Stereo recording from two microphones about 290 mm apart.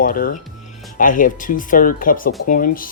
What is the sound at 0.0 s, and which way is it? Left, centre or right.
Speech, left.